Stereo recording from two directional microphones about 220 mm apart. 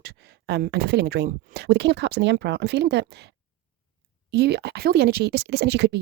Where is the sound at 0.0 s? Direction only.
50° right (ahead or behind).